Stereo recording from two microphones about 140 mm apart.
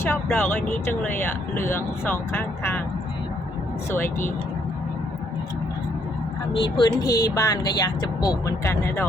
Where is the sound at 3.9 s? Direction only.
15° left (ahead or behind).